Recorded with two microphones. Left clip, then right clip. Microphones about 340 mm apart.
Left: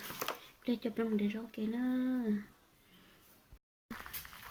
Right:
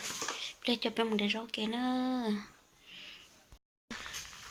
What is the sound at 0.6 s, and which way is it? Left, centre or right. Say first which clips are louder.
Speech: right 5 dB; right.